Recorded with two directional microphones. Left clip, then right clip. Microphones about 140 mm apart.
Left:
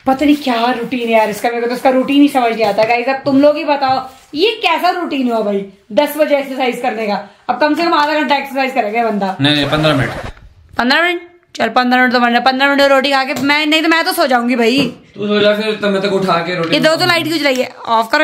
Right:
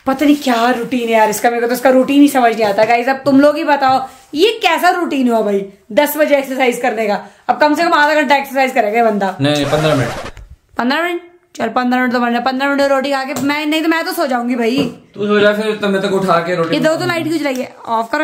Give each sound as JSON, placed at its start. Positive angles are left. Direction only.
{"t": 0.2, "sound": "a woman's voice", "side_deg": -15}
{"t": 10.8, "sound": "a woman's voice", "side_deg": -5}
{"t": 15.1, "sound": "a woman's voice", "side_deg": -5}
{"t": 16.7, "sound": "a woman's voice", "side_deg": 0}